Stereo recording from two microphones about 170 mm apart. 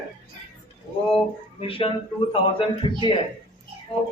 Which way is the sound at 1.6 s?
30° left (ahead or behind).